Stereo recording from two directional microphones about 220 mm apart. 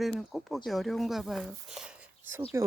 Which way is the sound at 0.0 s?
Centre (ahead or behind).